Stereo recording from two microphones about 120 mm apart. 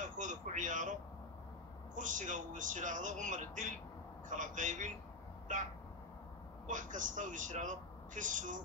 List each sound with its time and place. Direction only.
0.0 s a sound: 90° right
2.0 s a man's voice: 90° right
6.7 s a man's voice: 90° right